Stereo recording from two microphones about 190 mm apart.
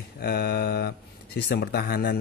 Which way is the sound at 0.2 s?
55° left (ahead or behind).